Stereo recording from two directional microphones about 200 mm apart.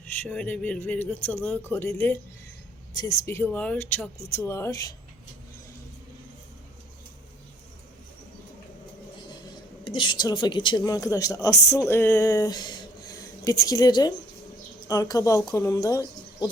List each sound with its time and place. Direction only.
0.0 s speech: 5° left (ahead or behind)
9.8 s speech: 25° left (ahead or behind)